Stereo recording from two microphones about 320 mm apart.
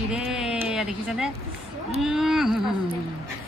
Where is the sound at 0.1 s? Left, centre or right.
Centre.